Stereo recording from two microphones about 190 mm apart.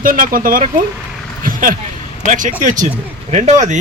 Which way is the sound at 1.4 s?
45° right (ahead or behind).